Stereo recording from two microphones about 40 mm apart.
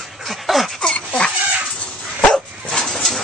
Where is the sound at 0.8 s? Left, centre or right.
Left.